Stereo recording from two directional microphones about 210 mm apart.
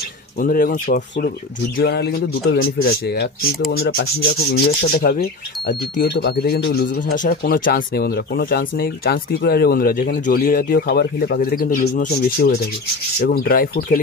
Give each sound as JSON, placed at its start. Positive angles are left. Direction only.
{"t": 0.4, "sound": "speech", "side_deg": 40}
{"t": 1.8, "sound": "rub", "side_deg": 50}